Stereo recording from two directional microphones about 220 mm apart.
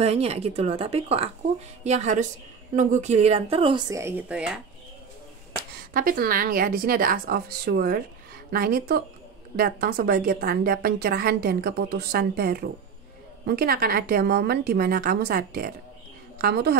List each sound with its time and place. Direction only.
0.0 s a woman's voice: 30° right (ahead or behind); by 4.6 s 5° right (ahead or behind)
5.9 s a woman's voice: 40° right (ahead or behind)